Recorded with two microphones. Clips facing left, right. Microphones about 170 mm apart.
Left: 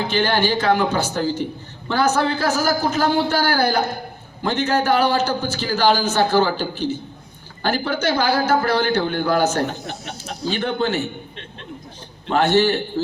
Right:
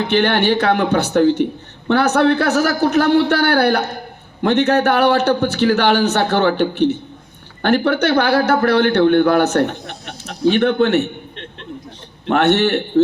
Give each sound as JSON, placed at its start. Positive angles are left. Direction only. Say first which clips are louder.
{"t": 0.0, "sound": "a man's voice", "louder": "right 4 dB", "side_deg": -65}
{"t": 12.3, "sound": "a man's voice", "louder": "right 2 dB", "side_deg": -65}